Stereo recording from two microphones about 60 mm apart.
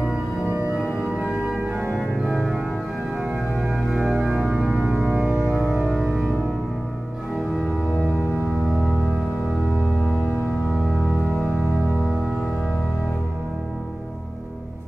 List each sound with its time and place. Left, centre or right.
0.5 s music: right
1.0 s organ: centre
3.7 s organ: centre
4.4 s music: centre